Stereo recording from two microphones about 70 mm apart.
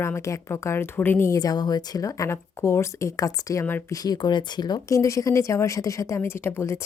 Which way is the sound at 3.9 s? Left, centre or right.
Left.